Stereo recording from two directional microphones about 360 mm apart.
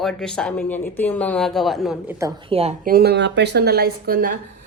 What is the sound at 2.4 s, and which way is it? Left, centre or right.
Speech, centre.